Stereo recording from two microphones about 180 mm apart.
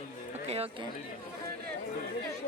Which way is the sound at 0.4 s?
35° right (ahead or behind).